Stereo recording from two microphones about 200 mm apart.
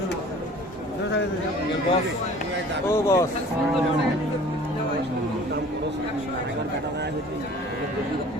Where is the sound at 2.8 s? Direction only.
15° left (ahead or behind).